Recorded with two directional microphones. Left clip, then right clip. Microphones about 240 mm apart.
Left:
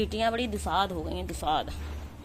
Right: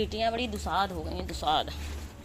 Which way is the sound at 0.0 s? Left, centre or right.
Centre.